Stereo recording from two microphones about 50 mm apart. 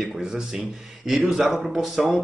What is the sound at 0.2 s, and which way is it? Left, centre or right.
A man's voice, centre.